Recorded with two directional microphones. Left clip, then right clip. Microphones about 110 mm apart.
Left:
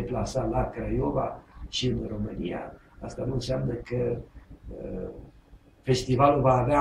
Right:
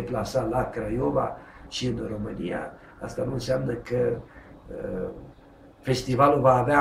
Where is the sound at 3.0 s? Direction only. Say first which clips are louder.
Right 3 dB; 25° right (ahead or behind).